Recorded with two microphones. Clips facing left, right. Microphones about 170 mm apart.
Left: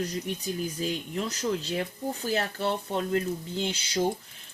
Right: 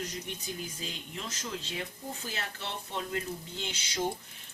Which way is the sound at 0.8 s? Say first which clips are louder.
Left 10 dB; 45° left (ahead or behind).